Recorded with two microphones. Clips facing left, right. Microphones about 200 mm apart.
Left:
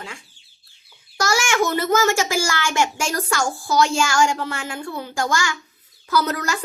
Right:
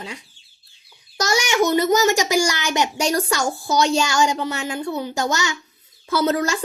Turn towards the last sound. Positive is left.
turn(degrees=-25)  # may be behind; listen again after turning